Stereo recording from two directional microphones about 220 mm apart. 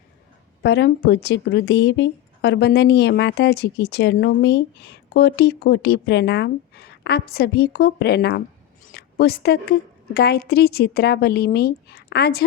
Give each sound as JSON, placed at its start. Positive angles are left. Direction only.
{"t": 0.6, "sound": "speech", "side_deg": 50}